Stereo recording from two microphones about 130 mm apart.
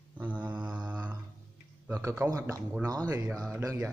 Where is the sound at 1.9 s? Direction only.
20° right (ahead or behind).